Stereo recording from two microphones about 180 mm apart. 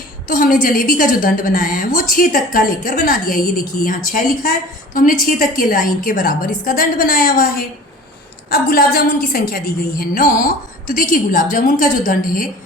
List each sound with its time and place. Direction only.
0.3 s a woman's voice: 50° left (ahead or behind)